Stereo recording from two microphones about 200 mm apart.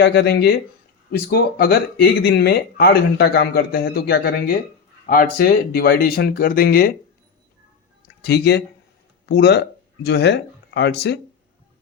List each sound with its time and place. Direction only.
0.0 s speech: 60° left (ahead or behind)
8.2 s speech: 55° left (ahead or behind)